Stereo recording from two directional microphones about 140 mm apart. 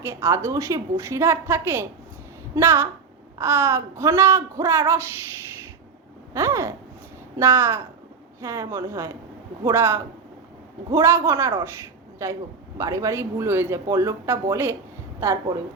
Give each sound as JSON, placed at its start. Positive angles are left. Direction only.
{"t": 0.0, "sound": "a man's voice", "side_deg": -20}
{"t": 6.3, "sound": "a man's voice", "side_deg": -20}